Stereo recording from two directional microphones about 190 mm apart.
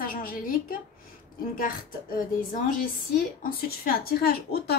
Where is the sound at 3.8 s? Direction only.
50° left (ahead or behind).